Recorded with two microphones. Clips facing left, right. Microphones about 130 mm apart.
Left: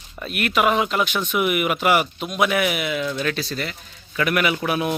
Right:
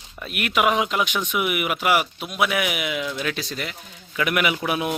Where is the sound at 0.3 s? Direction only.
10° right (ahead or behind).